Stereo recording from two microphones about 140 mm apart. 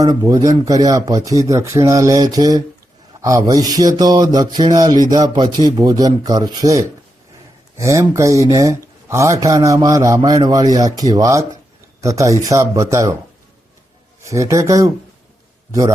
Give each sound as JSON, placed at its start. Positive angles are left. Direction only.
{"t": 0.0, "sound": "speech", "side_deg": -25}
{"t": 14.3, "sound": "speech", "side_deg": -20}